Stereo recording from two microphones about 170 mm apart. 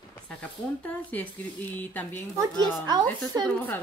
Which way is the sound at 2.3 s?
25° right (ahead or behind).